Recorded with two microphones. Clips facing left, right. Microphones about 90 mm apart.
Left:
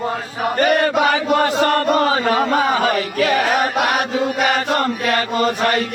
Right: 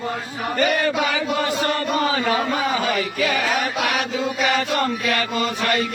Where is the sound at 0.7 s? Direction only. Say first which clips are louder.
Left 5 dB; 60° left (ahead or behind).